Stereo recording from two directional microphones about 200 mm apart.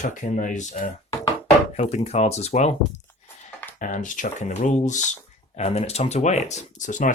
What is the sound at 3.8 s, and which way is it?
Speech, 40° left (ahead or behind).